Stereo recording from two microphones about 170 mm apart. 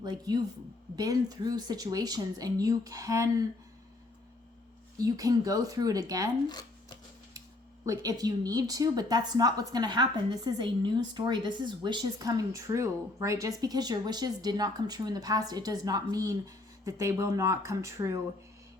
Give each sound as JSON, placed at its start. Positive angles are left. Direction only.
{"t": 0.0, "sound": "a woman's voice", "side_deg": -25}
{"t": 4.9, "sound": "a woman's voice", "side_deg": -20}
{"t": 7.9, "sound": "a woman's voice", "side_deg": -20}